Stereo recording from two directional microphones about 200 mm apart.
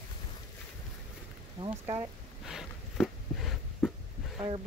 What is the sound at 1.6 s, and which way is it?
Speech, 30° right (ahead or behind).